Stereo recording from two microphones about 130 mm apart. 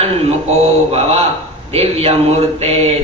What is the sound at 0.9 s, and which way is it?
Mantra, 50° right (ahead or behind).